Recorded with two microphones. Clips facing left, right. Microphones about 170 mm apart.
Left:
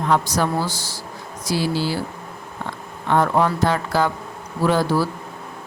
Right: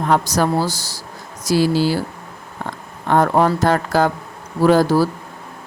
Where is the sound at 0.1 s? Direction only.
40° right (ahead or behind).